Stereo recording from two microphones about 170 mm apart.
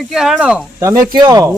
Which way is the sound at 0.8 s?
25° right (ahead or behind).